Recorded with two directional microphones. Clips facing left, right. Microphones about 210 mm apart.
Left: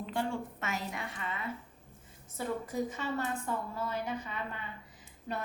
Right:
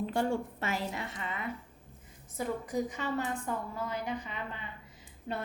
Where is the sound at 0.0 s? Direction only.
40° right (ahead or behind).